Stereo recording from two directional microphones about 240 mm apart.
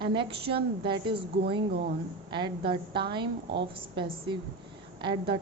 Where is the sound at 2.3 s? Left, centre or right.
Centre.